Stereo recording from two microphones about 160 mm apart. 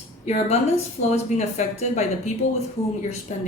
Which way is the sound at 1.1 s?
45° left (ahead or behind).